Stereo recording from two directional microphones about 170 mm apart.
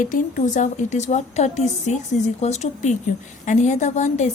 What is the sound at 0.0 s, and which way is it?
A woman's voice, 50° left (ahead or behind).